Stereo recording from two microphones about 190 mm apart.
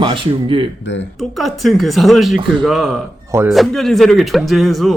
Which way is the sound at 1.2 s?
Centre (ahead or behind).